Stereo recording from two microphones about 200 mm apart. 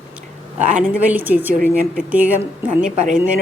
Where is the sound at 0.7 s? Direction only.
5° right (ahead or behind).